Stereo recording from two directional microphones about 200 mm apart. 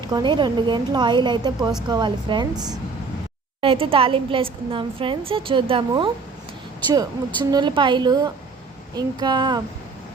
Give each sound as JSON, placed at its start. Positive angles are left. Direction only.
{"t": 0.0, "sound": "a woman's voice", "side_deg": -20}